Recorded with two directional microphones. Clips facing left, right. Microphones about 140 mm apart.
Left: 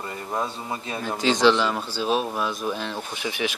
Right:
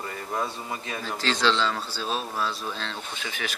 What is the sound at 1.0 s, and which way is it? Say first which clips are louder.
Speech: left 6 dB; 15° left (ahead or behind).